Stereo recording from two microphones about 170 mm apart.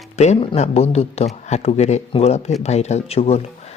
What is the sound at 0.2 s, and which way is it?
Speech, 40° left (ahead or behind).